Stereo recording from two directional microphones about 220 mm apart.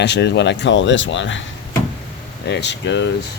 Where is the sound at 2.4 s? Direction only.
50° left (ahead or behind).